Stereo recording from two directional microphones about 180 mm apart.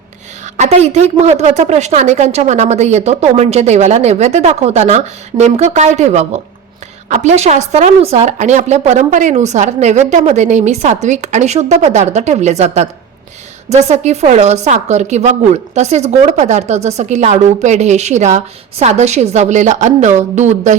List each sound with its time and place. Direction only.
0.5 s a woman's voice: 40° right (ahead or behind)